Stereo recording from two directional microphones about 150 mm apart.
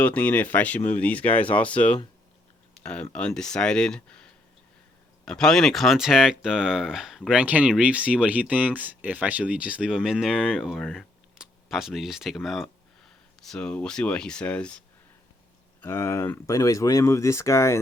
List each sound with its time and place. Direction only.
0.0 s speech: 10° left (ahead or behind)
15.8 s speech: 15° left (ahead or behind)